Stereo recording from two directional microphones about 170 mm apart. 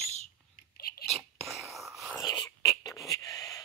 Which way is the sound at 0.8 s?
60° left (ahead or behind).